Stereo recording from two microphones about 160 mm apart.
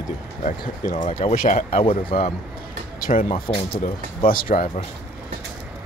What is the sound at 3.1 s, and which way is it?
Speech, 45° left (ahead or behind).